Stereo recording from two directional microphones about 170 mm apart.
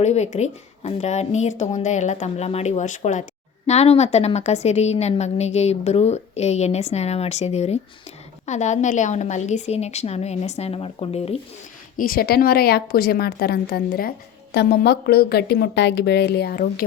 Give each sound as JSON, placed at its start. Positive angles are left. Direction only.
{"t": 0.0, "sound": "a woman's voice", "side_deg": 40}
{"t": 11.9, "sound": "a woman's voice", "side_deg": 60}